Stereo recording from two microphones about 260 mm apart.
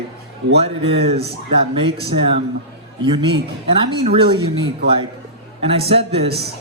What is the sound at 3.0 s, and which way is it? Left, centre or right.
A man's voice, centre.